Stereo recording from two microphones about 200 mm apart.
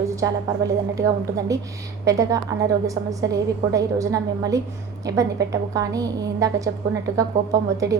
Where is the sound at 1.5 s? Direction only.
15° right (ahead or behind).